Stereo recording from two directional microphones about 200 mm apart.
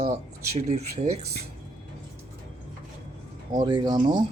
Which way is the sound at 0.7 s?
35° right (ahead or behind).